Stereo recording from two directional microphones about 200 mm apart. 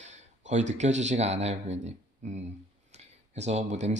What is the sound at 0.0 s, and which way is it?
A man's voice, 35° right (ahead or behind).